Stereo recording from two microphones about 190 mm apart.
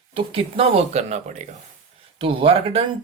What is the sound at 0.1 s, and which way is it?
Speech, 30° right (ahead or behind).